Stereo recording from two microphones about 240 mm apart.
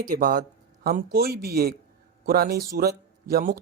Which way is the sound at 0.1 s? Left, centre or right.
Right.